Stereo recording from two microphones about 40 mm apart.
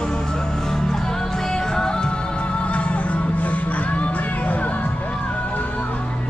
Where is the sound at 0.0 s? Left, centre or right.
Centre; by 5.9 s left.